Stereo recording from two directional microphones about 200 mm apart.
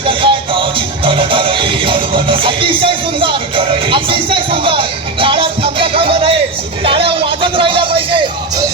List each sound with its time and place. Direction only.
0.0 s music: 25° right (ahead or behind)